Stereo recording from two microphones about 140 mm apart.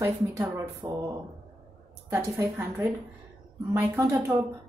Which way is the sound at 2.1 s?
20° right (ahead or behind).